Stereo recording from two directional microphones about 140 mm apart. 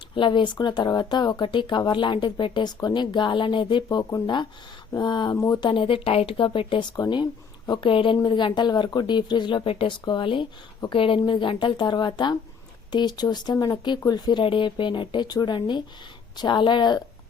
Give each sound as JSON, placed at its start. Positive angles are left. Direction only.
{"t": 0.2, "sound": "speech", "side_deg": 35}